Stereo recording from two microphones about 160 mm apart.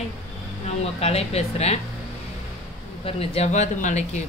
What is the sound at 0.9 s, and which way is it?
Speech, 40° left (ahead or behind).